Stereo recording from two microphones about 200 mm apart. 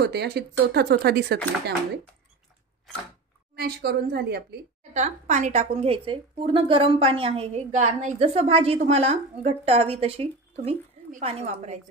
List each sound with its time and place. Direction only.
0.0 s speech: 55° right (ahead or behind)
3.5 s speech: 50° right (ahead or behind)
4.9 s a woman's voice: 35° right (ahead or behind)